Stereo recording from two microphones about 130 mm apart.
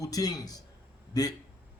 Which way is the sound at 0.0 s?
30° left (ahead or behind).